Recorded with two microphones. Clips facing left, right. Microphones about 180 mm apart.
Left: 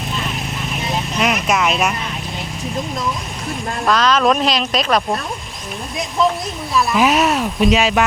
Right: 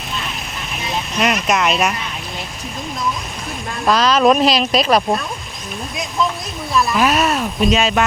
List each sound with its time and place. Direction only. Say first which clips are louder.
1.2 s vehicle: right 1 dB; centre (ahead or behind)
3.8 s speech: right 2 dB; 10° right (ahead or behind)
6.9 s speech: left 3 dB; 15° left (ahead or behind)